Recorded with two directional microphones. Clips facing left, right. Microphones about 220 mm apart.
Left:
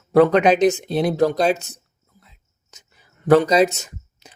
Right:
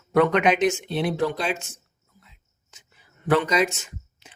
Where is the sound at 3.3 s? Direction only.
40° left (ahead or behind).